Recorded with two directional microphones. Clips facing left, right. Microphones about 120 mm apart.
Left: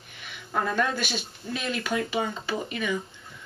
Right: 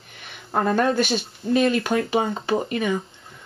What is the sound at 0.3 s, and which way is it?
Speech, 45° right (ahead or behind).